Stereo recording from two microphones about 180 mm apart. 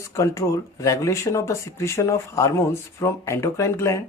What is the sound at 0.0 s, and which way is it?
Speech, 15° left (ahead or behind).